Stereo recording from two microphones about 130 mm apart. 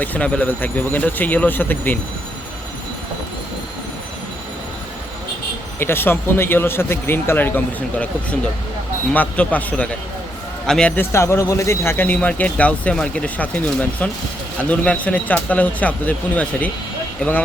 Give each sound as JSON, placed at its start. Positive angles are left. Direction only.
{"t": 0.0, "sound": "a man's voice", "side_deg": 10}
{"t": 5.8, "sound": "a man's voice", "side_deg": 15}
{"t": 11.1, "sound": "a man's voice", "side_deg": 20}